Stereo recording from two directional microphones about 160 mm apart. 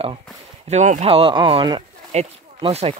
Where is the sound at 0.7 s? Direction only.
45° right (ahead or behind); by 1.8 s 30° right (ahead or behind).